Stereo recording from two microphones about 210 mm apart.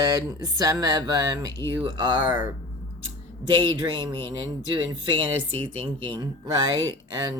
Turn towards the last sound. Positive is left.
turn(degrees=-20)  # may be behind; listen again after turning